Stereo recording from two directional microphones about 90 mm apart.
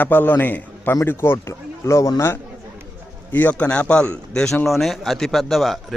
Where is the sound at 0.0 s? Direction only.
20° left (ahead or behind).